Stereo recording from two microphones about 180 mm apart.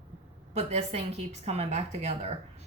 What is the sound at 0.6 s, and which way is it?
Speech, 35° right (ahead or behind).